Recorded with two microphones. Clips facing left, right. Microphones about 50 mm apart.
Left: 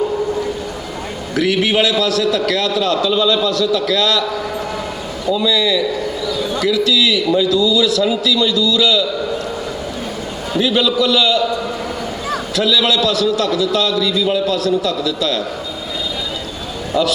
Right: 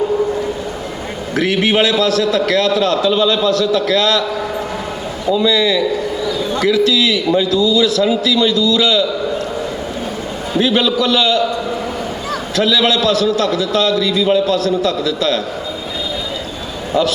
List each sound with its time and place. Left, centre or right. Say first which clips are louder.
1.4 s a man's voice: right 1 dB; right
5.2 s a man's voice: right 2 dB; right
10.5 s a man's voice: right 1 dB; right
12.5 s a man's voice: right 2 dB; right